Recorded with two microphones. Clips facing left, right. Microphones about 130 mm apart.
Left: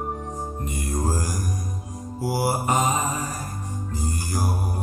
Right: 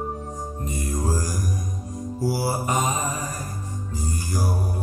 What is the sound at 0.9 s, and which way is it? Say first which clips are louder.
Music: left 1 dB; 45° left (ahead or behind).